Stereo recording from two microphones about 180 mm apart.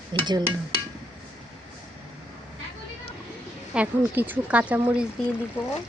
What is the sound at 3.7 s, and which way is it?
Speech, 10° right (ahead or behind).